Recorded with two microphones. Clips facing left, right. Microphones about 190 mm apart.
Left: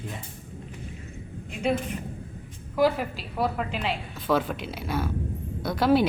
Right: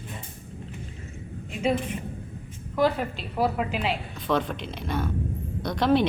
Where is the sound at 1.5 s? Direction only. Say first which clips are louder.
Right 1 dB; centre (ahead or behind).